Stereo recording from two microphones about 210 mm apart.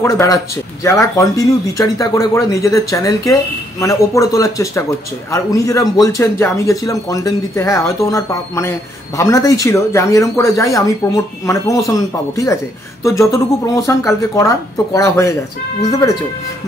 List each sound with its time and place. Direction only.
0.0 s speech: 15° left (ahead or behind)